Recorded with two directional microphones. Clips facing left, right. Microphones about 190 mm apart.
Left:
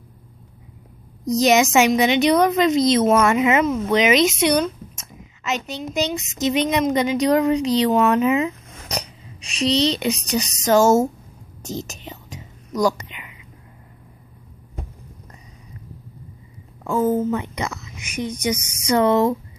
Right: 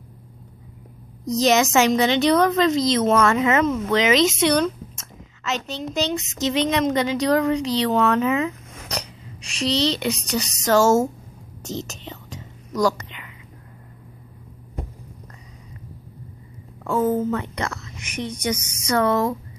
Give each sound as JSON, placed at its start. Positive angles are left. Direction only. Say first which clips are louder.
{"t": 1.2, "sound": "a woman's voice", "louder": "left 2 dB", "side_deg": 15}
{"t": 11.6, "sound": "whispering", "louder": "left 1 dB", "side_deg": 10}
{"t": 16.8, "sound": "a woman's voice", "louder": "left 1 dB", "side_deg": 10}